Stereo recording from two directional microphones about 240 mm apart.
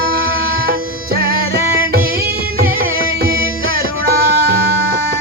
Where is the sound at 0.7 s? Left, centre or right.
Right.